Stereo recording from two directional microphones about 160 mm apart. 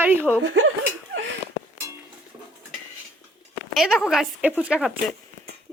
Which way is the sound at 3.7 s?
5° right (ahead or behind).